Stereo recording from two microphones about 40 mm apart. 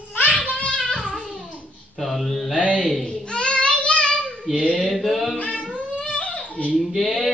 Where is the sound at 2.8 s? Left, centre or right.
Centre.